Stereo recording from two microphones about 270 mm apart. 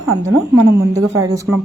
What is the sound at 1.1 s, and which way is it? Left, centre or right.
Speech, centre.